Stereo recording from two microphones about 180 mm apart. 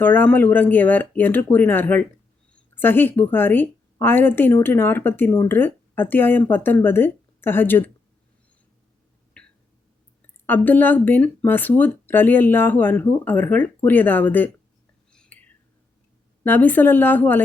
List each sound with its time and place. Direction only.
0.0 s a woman's voice: 10° left (ahead or behind)
9.4 s a sound: 5° left (ahead or behind)
10.4 s speech: 10° left (ahead or behind)
15.1 s whispering: 5° left (ahead or behind)
16.4 s speech: 10° left (ahead or behind)